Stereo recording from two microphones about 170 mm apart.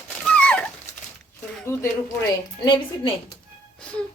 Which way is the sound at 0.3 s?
5° left (ahead or behind).